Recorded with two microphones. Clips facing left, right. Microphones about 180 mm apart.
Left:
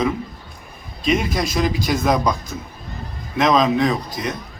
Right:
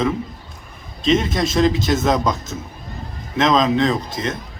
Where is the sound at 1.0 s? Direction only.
25° right (ahead or behind).